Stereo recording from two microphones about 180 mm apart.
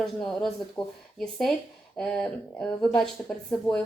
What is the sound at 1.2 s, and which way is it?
Speech, centre (ahead or behind).